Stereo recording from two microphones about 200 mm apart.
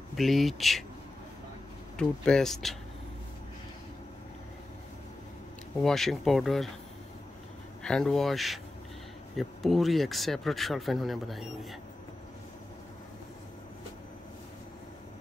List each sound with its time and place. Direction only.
0.1 s speech: centre (ahead or behind)
2.0 s speech: 5° left (ahead or behind)
5.9 s speech: centre (ahead or behind)
7.8 s speech: 5° left (ahead or behind)